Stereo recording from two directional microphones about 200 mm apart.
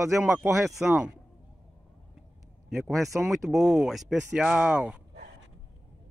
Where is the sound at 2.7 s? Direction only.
Centre (ahead or behind).